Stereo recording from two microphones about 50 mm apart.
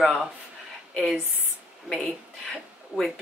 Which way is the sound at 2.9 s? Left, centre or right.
Right.